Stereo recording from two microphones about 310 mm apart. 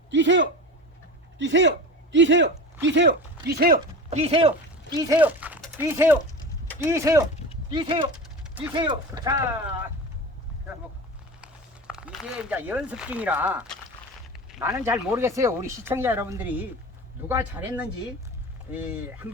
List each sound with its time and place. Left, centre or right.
0.1 s speech: right; by 9.5 s centre
11.9 s speech: centre